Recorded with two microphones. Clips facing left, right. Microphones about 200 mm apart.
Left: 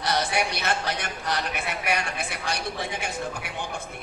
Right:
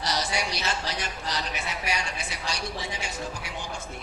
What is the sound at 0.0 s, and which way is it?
Speech, 55° left (ahead or behind).